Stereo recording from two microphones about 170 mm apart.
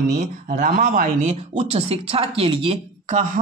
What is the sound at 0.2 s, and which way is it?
A woman's voice, 45° right (ahead or behind).